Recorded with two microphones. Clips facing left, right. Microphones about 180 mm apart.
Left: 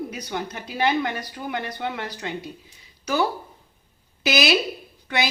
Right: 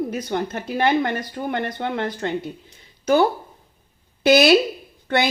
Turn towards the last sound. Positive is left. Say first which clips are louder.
# right 5 dB
turn(degrees=-55)  # may be behind; listen again after turning